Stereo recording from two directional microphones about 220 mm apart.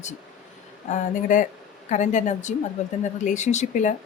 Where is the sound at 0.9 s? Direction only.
35° left (ahead or behind).